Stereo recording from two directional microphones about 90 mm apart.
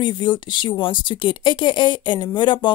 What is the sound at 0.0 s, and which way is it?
Speech, 60° left (ahead or behind).